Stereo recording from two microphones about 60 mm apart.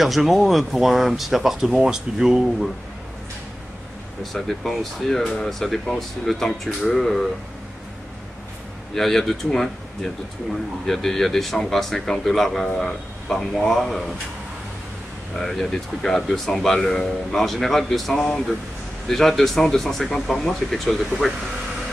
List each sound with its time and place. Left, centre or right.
0.0 s speech: centre
4.2 s speech: centre
5.5 s speech: centre
8.9 s speech: centre
15.3 s speech: centre